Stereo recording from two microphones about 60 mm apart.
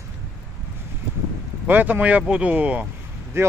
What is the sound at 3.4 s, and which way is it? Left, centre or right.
Speech, right.